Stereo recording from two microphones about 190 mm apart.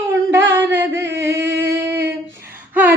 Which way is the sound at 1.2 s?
15° right (ahead or behind).